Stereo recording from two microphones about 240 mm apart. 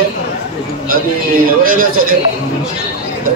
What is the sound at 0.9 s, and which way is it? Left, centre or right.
A man's voice, right.